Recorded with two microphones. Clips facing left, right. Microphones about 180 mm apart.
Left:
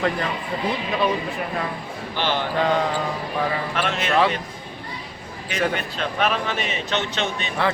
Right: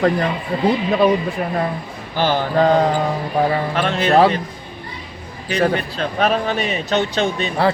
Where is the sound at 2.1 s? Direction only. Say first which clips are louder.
Right 6 dB; 40° right (ahead or behind).